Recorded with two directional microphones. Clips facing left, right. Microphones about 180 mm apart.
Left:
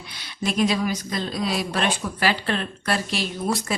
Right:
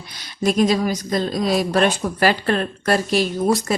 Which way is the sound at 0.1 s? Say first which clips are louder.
Right 7 dB; 40° right (ahead or behind).